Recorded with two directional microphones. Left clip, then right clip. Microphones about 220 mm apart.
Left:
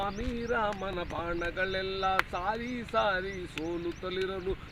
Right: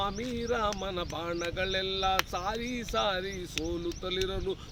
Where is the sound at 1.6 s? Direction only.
30° right (ahead or behind).